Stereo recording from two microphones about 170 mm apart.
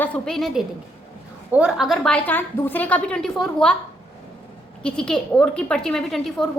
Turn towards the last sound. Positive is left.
turn(degrees=0)  # may be behind; listen again after turning